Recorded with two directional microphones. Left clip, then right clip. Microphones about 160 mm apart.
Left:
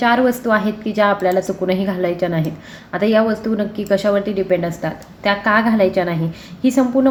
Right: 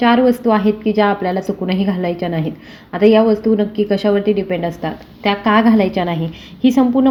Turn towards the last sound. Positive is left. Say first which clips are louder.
# right 1 dB
turn(degrees=-45)  # may be behind; listen again after turning